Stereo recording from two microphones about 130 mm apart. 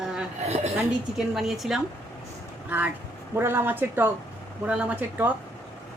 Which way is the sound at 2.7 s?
15° right (ahead or behind).